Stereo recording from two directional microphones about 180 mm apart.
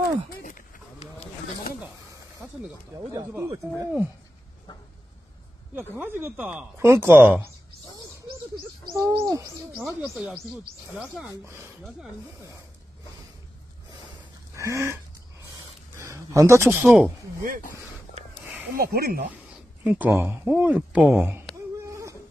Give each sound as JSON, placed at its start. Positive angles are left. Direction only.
{"t": 0.4, "sound": "a sound", "side_deg": 45}
{"t": 3.2, "sound": "speech", "side_deg": -20}
{"t": 5.8, "sound": "speech", "side_deg": -10}
{"t": 8.8, "sound": "a child's voice", "side_deg": -20}
{"t": 9.8, "sound": "speech", "side_deg": 0}
{"t": 11.2, "sound": "speech", "side_deg": -15}
{"t": 14.5, "sound": "a sound", "side_deg": -15}
{"t": 16.0, "sound": "a sound", "side_deg": -15}
{"t": 16.8, "sound": "speech", "side_deg": -5}
{"t": 18.8, "sound": "speech", "side_deg": -55}
{"t": 19.8, "sound": "speech", "side_deg": -5}